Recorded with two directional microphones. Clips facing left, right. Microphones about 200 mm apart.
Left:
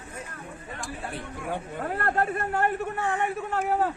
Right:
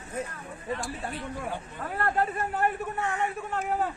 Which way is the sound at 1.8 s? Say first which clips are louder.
Even; 50° left (ahead or behind).